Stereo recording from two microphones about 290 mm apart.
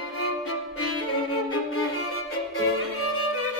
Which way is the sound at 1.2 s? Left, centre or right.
Left.